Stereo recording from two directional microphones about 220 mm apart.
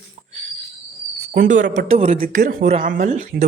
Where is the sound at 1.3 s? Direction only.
35° right (ahead or behind).